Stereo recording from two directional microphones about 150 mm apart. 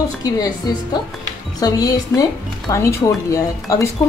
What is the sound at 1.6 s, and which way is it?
A woman's voice, 25° left (ahead or behind).